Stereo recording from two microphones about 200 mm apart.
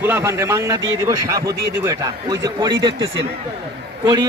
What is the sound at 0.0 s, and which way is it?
A man's voice, 10° right (ahead or behind).